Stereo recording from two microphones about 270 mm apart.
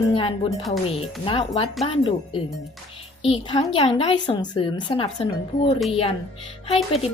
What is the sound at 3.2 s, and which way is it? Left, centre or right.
A woman's voice, left.